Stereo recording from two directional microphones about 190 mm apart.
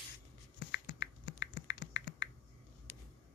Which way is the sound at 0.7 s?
65° left (ahead or behind).